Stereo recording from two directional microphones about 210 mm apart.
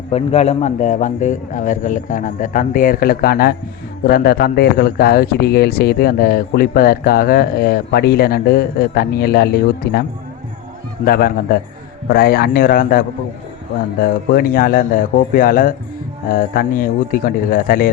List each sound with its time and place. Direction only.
0.1 s a man's voice: 30° left (ahead or behind); by 10.0 s 45° left (ahead or behind)
11.0 s a man's voice: 45° left (ahead or behind)